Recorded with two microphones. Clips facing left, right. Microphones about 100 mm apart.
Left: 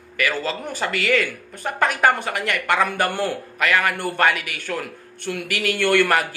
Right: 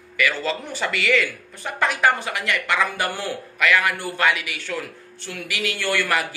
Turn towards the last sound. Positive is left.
turn(degrees=50)  # may be behind; listen again after turning